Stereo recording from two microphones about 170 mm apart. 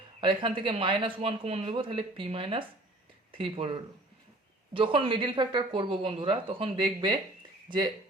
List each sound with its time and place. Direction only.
0.2 s speech: 30° right (ahead or behind)